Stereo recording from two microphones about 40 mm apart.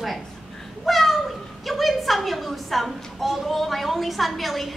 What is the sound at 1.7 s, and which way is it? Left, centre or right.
A woman's voice, centre.